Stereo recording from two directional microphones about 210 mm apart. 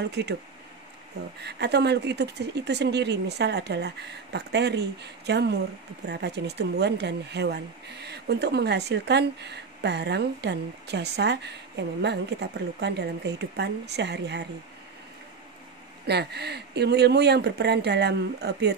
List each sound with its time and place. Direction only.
0.0 s speech: 55° right (ahead or behind)
1.4 s speech: 50° right (ahead or behind)
16.1 s speech: 50° right (ahead or behind)